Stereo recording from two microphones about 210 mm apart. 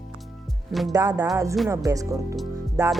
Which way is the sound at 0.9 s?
15° right (ahead or behind).